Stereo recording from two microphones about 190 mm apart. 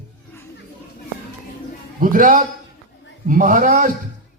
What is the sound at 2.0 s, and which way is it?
A man's voice, 45° right (ahead or behind).